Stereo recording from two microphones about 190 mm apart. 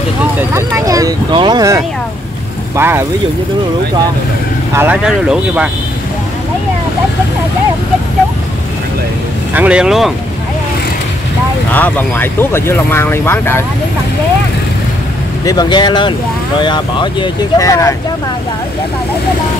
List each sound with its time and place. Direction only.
0.2 s speech: 10° right (ahead or behind)
4.7 s speech: 5° right (ahead or behind)
9.5 s speech: 5° right (ahead or behind)
11.7 s speech: 10° left (ahead or behind)
15.4 s speech: 20° left (ahead or behind)